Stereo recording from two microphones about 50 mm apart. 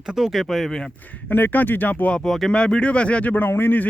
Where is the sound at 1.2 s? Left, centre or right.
Left.